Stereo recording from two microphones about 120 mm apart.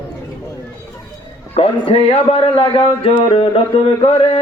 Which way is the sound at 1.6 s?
55° left (ahead or behind).